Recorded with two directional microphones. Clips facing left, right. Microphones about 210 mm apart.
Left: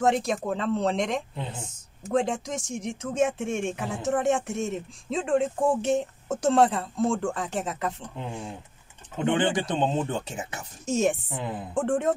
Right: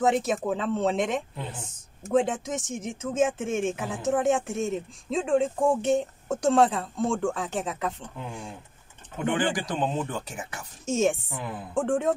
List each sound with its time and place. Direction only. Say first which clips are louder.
0.0 s speech: even; 5° right (ahead or behind)
8.2 s speech: left 2 dB; 20° left (ahead or behind)
10.9 s speech: even; centre (ahead or behind)
11.2 s speech: left 2 dB; 20° left (ahead or behind)
11.7 s speech: even; centre (ahead or behind)